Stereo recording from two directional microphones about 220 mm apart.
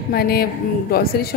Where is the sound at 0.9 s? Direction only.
45° left (ahead or behind).